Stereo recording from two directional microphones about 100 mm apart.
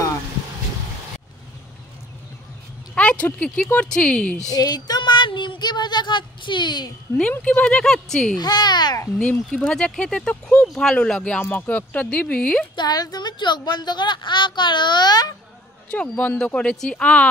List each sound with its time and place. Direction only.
2.9 s a sound: 10° left (ahead or behind)
3.4 s speech: 5° left (ahead or behind)
4.5 s child singing: 40° left (ahead or behind)
7.4 s speech: 10° left (ahead or behind)
8.4 s a woman's voice: 45° left (ahead or behind)
9.2 s speech: 10° left (ahead or behind)
12.7 s a woman's voice: 45° left (ahead or behind)
15.9 s speech: 15° left (ahead or behind)